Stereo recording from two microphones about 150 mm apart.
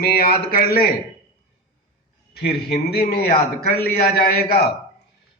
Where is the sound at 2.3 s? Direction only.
90° left.